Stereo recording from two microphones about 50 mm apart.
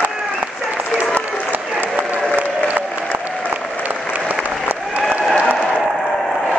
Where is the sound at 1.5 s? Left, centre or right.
Right.